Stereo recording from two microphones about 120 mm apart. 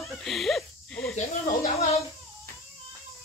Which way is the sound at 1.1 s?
60° left (ahead or behind).